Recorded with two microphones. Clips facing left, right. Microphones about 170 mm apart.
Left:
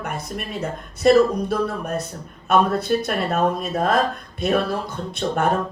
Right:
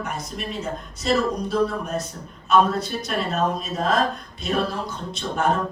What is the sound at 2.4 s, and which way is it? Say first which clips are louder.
A woman's voice: left 1 dB; 55° left (ahead or behind).